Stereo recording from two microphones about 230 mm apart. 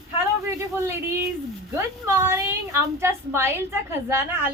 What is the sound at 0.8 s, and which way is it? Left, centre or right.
A woman's voice, centre.